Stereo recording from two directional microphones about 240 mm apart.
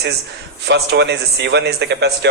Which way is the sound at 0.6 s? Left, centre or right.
Right.